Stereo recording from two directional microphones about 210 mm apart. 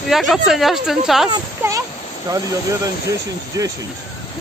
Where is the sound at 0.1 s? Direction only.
Centre (ahead or behind).